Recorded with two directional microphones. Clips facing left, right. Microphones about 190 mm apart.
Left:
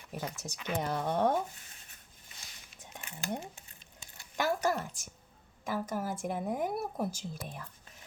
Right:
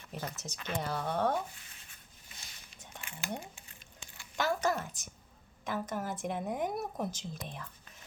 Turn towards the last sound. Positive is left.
turn(degrees=5)  # may be behind; listen again after turning